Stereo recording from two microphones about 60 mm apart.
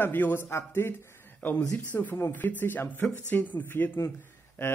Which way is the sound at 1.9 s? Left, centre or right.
Left.